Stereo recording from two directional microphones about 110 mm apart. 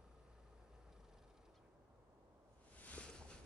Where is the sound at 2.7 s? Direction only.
10° left (ahead or behind).